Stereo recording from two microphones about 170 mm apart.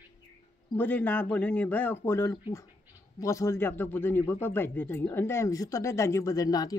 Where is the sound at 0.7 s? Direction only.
10° left (ahead or behind).